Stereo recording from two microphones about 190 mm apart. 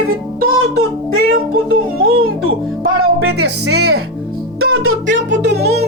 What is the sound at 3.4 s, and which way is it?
Speech, 60° right (ahead or behind).